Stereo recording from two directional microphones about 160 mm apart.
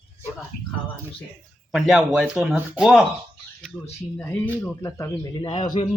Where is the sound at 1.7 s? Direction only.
Centre (ahead or behind).